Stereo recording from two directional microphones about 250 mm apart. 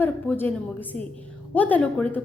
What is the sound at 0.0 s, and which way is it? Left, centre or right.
A woman's voice, centre.